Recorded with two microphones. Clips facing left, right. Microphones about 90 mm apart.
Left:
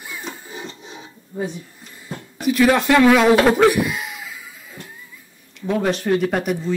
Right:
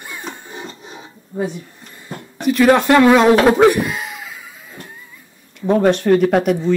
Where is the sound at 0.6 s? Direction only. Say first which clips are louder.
Right 2 dB; 35° right (ahead or behind).